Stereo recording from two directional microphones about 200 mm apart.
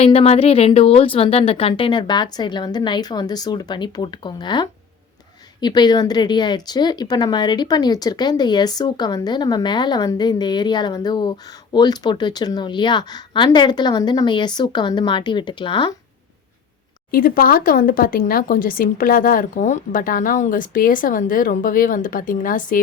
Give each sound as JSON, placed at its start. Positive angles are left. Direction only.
{"t": 0.0, "sound": "speech", "side_deg": 30}
{"t": 17.1, "sound": "speech", "side_deg": 45}